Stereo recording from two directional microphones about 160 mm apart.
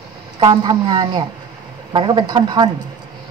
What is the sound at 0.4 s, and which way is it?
Speech, 25° right (ahead or behind).